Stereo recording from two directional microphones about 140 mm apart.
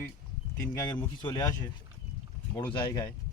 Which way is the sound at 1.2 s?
30° left (ahead or behind).